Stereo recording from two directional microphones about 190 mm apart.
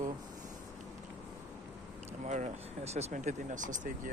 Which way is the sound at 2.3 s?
35° right (ahead or behind).